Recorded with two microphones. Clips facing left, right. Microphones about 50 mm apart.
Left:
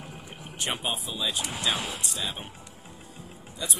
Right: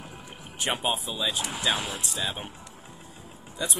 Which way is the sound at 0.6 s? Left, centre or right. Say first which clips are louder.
Right 3 dB; centre.